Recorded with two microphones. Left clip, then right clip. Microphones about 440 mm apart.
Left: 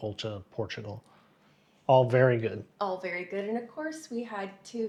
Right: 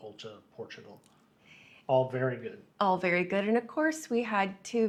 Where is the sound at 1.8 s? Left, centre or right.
Left.